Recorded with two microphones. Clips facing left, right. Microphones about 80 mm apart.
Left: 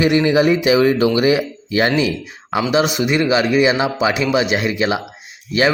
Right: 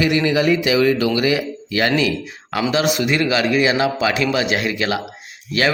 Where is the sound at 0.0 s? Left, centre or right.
Left.